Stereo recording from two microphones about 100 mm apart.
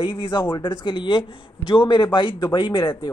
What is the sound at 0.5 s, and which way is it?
A man's voice, 55° left (ahead or behind).